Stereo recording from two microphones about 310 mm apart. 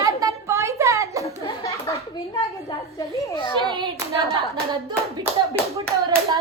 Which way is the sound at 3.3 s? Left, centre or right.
Centre.